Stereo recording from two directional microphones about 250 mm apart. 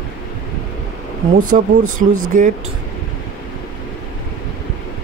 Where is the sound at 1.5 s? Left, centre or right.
Right.